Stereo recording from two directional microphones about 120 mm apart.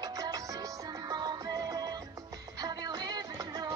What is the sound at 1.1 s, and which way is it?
Music, 35° right (ahead or behind).